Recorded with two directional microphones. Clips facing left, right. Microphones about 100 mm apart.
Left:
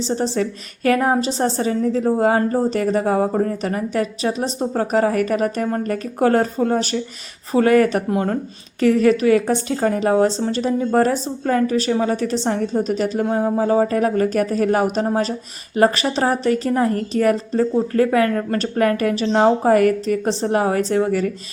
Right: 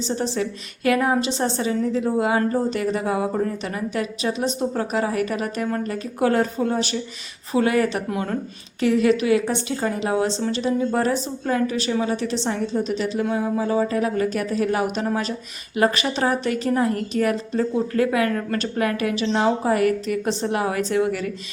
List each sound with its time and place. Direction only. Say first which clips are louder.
0.0 s a woman's voice: left 4 dB; 35° left (ahead or behind)